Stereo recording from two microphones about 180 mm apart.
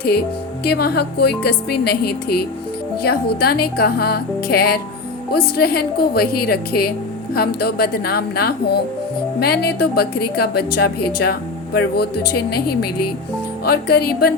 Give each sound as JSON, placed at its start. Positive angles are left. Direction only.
{"t": 0.6, "sound": "speech", "side_deg": 65}